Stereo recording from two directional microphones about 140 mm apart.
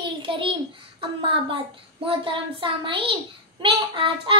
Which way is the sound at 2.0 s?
40° right (ahead or behind).